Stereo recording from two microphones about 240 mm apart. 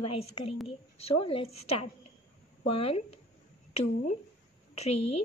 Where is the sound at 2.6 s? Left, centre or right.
Left.